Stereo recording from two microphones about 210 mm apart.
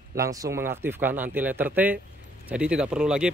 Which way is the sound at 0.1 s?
15° right (ahead or behind).